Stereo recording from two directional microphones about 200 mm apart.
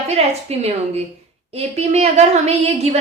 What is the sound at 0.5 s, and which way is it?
A woman's voice, 30° right (ahead or behind).